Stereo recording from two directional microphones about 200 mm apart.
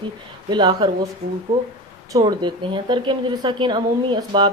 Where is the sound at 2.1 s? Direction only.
20° right (ahead or behind).